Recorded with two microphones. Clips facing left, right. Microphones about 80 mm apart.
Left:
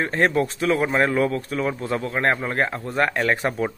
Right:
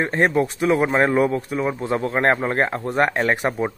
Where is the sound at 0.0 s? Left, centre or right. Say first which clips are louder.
Right 2 dB; right.